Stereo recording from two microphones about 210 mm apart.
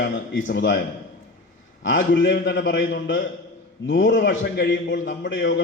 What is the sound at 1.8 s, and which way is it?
A man's voice, 60° left (ahead or behind).